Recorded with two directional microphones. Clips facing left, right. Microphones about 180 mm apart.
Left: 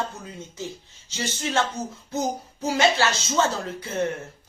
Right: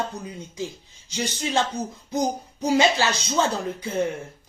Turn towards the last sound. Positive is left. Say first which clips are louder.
# right 2 dB
turn(degrees=-10)  # may be behind; listen again after turning